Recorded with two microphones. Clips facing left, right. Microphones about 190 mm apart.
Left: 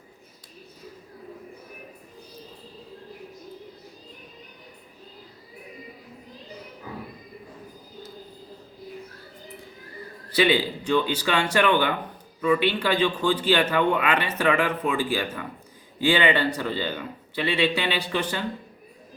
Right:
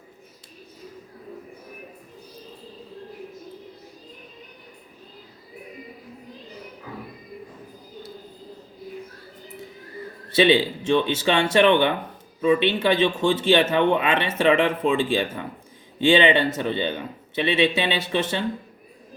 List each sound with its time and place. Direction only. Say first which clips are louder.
10.2 s speech: right 4 dB; 25° right (ahead or behind)